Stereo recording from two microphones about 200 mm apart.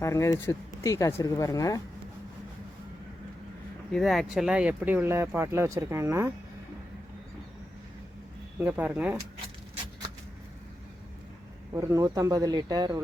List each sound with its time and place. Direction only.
0.0 s speech: 15° left (ahead or behind)
3.9 s speech: centre (ahead or behind)
8.6 s speech: 5° right (ahead or behind)
11.7 s speech: 15° right (ahead or behind)